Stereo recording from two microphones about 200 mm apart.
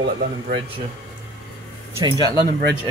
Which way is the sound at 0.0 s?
50° right (ahead or behind).